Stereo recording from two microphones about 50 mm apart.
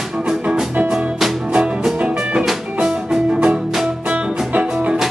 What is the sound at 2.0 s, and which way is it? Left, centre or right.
Music, right.